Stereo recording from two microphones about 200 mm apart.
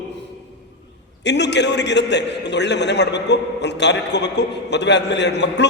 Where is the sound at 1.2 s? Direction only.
60° left (ahead or behind).